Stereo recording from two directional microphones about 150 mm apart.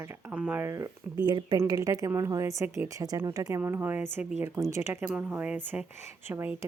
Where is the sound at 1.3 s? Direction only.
30° right (ahead or behind); by 6.7 s 15° right (ahead or behind).